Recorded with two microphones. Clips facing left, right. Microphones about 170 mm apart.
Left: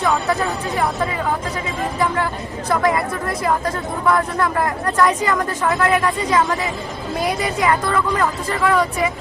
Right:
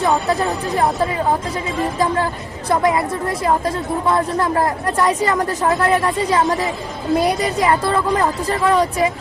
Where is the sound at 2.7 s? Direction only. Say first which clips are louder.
Right 2 dB; 20° right (ahead or behind).